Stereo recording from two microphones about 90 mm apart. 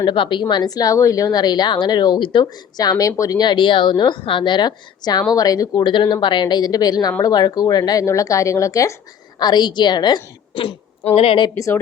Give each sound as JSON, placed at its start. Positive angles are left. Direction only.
{"t": 0.0, "sound": "a woman's voice", "side_deg": 65}
{"t": 5.7, "sound": "a woman's voice", "side_deg": 60}
{"t": 8.0, "sound": "speech", "side_deg": 35}
{"t": 9.4, "sound": "a woman's voice", "side_deg": 50}
{"t": 11.5, "sound": "speech", "side_deg": 35}